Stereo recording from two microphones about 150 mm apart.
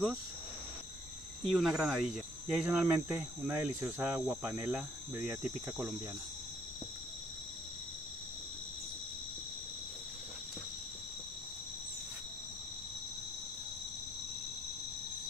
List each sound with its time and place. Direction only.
1.5 s cricket: 5° right (ahead or behind)